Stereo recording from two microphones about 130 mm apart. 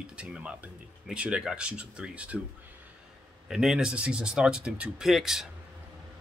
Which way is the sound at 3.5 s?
5° right (ahead or behind).